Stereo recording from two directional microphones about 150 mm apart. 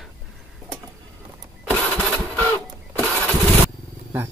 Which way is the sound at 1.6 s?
10° left (ahead or behind).